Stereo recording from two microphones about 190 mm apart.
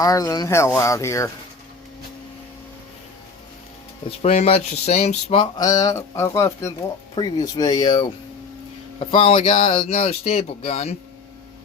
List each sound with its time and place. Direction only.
0.0 s speech: 20° left (ahead or behind)
4.2 s speech: 35° left (ahead or behind)
5.4 s speech: 20° left (ahead or behind)
9.2 s speech: 35° left (ahead or behind)